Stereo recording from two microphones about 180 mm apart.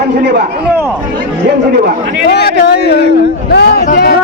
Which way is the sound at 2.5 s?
65° left (ahead or behind).